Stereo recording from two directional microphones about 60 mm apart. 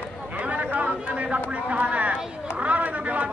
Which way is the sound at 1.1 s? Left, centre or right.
Right.